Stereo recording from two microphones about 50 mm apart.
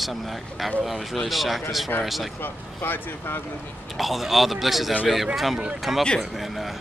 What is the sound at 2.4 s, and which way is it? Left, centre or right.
Speech, left.